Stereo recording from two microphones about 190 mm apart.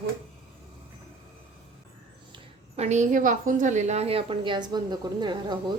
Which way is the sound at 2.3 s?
35° right (ahead or behind).